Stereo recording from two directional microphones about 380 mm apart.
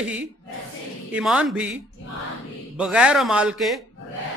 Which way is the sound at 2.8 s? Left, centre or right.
Centre.